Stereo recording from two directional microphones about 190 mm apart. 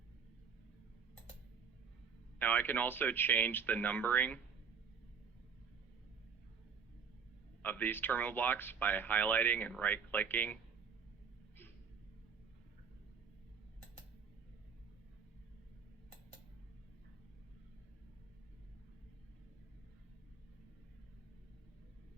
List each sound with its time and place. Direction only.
2.4 s speech: 10° left (ahead or behind)
7.6 s speech: 10° left (ahead or behind)